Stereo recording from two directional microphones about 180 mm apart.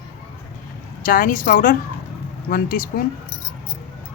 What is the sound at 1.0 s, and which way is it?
A man's voice, 50° left (ahead or behind).